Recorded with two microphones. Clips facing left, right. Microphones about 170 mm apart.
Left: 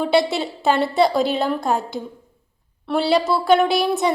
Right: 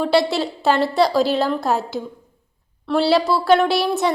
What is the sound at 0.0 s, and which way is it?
A woman's voice, centre (ahead or behind).